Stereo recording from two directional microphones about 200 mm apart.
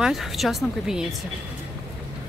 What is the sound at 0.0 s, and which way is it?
A woman's voice, centre (ahead or behind).